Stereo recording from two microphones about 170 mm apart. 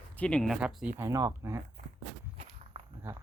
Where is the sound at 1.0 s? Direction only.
20° right (ahead or behind).